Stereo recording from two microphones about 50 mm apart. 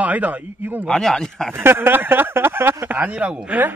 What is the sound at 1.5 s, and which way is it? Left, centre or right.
Speech, right.